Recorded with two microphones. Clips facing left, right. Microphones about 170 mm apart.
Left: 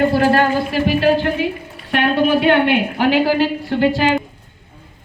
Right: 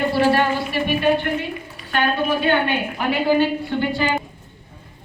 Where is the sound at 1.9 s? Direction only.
90° left.